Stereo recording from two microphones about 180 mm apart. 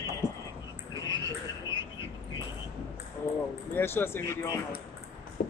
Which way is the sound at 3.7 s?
15° left (ahead or behind).